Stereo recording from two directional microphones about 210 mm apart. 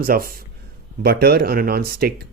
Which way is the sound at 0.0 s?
45° right (ahead or behind).